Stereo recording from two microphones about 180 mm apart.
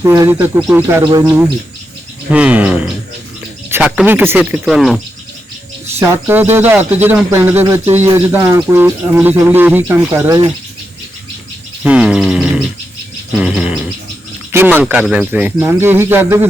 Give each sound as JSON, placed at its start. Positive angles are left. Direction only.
{"t": 0.0, "sound": "speech", "side_deg": -15}
{"t": 2.3, "sound": "speech", "side_deg": -5}
{"t": 4.6, "sound": "bird", "side_deg": 0}
{"t": 6.0, "sound": "speech", "side_deg": -15}
{"t": 11.8, "sound": "bird", "side_deg": -5}
{"t": 14.5, "sound": "speech", "side_deg": -10}